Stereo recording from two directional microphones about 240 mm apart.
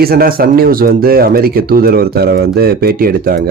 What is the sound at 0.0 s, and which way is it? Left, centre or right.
Speech, right.